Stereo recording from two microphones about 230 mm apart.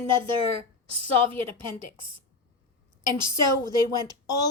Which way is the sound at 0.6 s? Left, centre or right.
Left.